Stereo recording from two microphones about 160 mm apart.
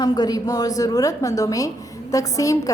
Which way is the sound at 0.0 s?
25° left (ahead or behind).